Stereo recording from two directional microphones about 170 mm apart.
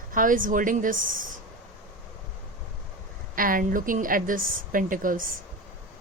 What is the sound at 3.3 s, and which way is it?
A woman's voice, 55° right (ahead or behind).